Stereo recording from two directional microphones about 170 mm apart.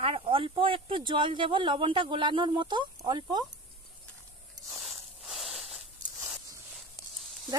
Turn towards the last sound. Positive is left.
turn(degrees=0)  # may be behind; listen again after turning